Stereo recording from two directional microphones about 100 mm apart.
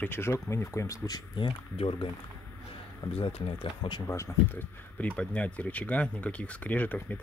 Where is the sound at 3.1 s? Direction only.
80° left.